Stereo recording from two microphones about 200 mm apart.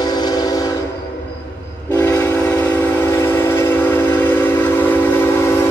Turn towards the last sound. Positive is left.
turn(degrees=10)  # may be behind; listen again after turning